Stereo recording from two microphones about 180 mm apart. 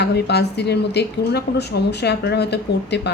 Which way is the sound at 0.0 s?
65° left (ahead or behind).